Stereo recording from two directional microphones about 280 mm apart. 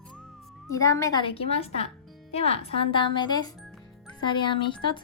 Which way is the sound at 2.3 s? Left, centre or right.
Left.